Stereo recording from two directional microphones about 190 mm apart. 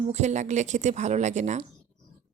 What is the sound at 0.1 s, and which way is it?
A woman's voice, 35° right (ahead or behind).